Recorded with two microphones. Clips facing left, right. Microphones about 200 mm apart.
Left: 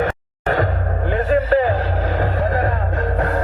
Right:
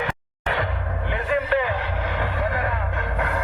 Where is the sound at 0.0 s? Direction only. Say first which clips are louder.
Left 7 dB; 45° left (ahead or behind).